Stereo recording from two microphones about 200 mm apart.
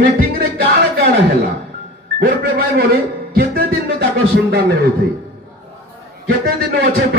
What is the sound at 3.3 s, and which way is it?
Music, 50° right (ahead or behind).